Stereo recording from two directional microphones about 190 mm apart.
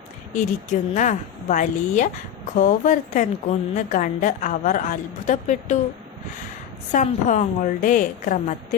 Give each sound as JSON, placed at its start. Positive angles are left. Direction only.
{"t": 0.3, "sound": "a woman's voice", "side_deg": 40}
{"t": 6.9, "sound": "a woman's voice", "side_deg": 40}